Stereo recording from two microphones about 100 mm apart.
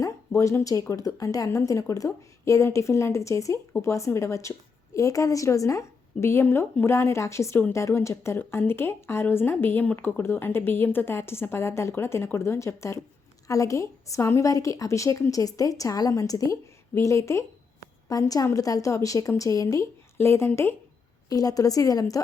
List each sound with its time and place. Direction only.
0.0 s a woman's voice: 30° left (ahead or behind)
21.2 s a woman's voice: 40° left (ahead or behind)